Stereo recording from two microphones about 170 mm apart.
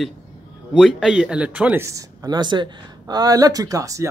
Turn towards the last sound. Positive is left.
turn(degrees=-20)  # may be behind; listen again after turning